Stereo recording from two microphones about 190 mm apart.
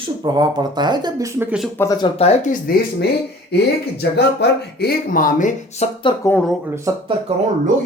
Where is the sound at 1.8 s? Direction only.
15° left (ahead or behind).